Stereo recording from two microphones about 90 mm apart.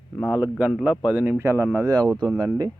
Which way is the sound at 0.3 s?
15° right (ahead or behind).